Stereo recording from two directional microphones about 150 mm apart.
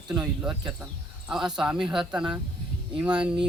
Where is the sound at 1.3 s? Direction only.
5° right (ahead or behind).